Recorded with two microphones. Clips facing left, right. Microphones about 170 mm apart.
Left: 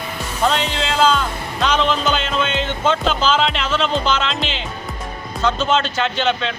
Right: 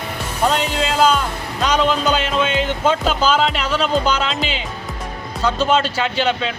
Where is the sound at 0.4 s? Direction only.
10° right (ahead or behind).